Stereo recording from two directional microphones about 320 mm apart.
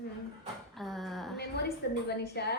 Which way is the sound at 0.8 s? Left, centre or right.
Centre.